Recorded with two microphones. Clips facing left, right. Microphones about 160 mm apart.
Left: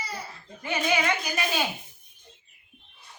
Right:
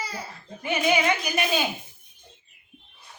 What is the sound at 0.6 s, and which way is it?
Speech, 20° right (ahead or behind).